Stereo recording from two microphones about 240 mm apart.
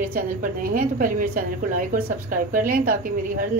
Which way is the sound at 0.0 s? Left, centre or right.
Right.